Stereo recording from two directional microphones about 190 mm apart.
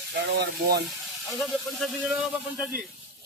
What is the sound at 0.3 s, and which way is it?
Speech, 60° right (ahead or behind).